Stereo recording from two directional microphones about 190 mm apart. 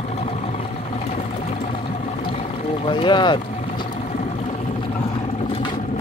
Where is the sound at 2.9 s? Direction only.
25° left (ahead or behind).